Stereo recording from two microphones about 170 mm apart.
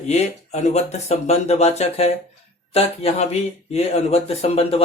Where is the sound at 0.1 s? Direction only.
40° left (ahead or behind).